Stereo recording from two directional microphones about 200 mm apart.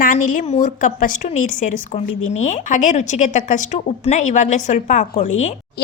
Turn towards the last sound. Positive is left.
turn(degrees=35)  # may be behind; listen again after turning